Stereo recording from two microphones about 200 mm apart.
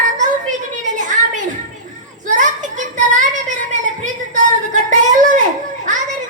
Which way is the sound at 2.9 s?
40° right (ahead or behind).